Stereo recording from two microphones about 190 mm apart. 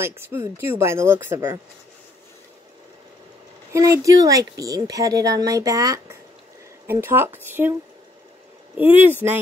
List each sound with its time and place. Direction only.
0.0 s speech: 15° right (ahead or behind)
3.7 s speech: 15° right (ahead or behind)
8.7 s speech: 10° right (ahead or behind)